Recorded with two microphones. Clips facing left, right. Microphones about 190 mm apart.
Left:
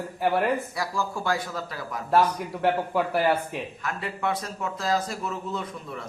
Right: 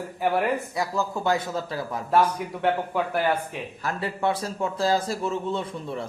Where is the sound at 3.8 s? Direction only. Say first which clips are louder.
Right 4 dB; 30° right (ahead or behind).